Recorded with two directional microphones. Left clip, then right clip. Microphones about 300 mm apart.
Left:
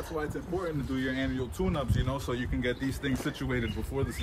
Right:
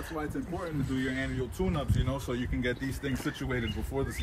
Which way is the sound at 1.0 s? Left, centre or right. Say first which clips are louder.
Left 2 dB; centre.